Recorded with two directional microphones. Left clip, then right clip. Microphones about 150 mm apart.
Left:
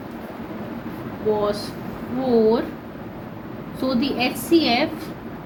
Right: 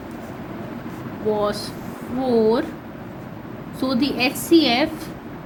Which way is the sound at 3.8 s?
75° right (ahead or behind).